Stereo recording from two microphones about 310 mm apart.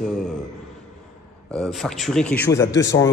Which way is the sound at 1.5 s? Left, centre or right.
Centre.